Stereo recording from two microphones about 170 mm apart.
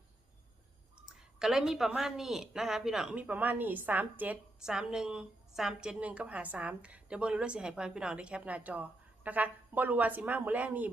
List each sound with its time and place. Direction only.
0.9 s speech: 5° right (ahead or behind)